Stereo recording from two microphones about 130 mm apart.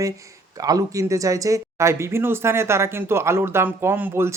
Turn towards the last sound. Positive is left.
turn(degrees=-15)  # may be behind; listen again after turning